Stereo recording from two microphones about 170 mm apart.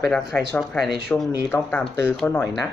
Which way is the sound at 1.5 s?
10° left (ahead or behind).